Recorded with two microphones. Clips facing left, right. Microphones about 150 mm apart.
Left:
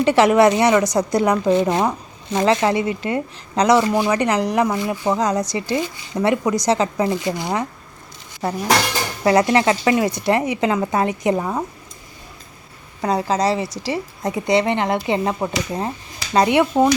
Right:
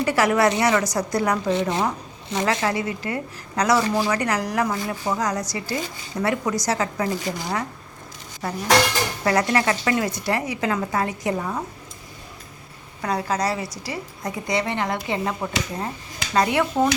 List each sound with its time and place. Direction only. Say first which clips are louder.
0.0 s speech: left 6 dB; 25° left (ahead or behind)
13.0 s speech: left 5 dB; 25° left (ahead or behind)